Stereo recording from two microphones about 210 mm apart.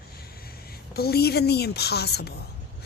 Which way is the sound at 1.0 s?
50° left (ahead or behind).